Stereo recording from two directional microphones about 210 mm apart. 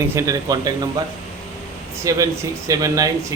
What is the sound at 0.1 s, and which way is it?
Speech, 15° right (ahead or behind).